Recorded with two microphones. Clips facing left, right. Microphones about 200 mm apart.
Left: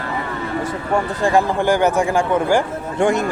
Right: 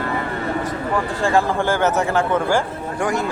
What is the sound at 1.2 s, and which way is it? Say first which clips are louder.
A man's voice: left 1 dB; 15° left (ahead or behind).